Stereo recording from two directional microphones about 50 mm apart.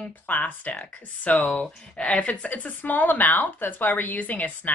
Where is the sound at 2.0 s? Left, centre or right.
Left.